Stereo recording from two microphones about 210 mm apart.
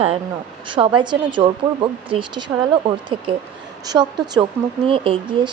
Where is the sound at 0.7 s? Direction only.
25° right (ahead or behind).